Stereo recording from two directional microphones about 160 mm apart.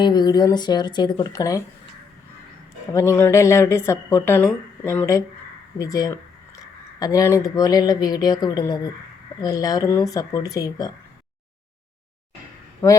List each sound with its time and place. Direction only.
0.0 s speech: 25° left (ahead or behind)
2.9 s speech: 15° left (ahead or behind)
12.8 s speech: 10° left (ahead or behind)